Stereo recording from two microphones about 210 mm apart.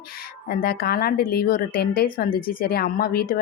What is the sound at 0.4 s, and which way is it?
A woman's voice, 45° left (ahead or behind).